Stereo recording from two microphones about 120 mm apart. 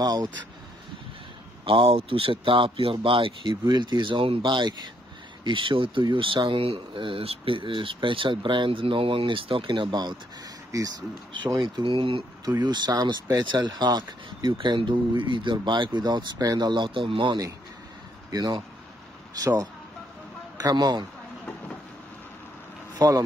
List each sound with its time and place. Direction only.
0.0 s speech: 35° right (ahead or behind)
1.6 s speech: 45° right (ahead or behind)
18.3 s speech: 30° right (ahead or behind)
22.9 s speech: 30° right (ahead or behind)